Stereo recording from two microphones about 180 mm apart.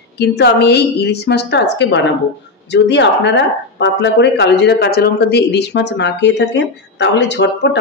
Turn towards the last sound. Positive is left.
turn(degrees=75)  # may be behind; listen again after turning